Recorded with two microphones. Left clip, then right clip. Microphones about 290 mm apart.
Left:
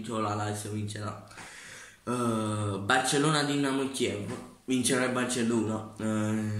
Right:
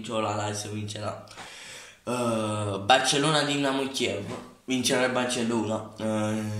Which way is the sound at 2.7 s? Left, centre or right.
Centre.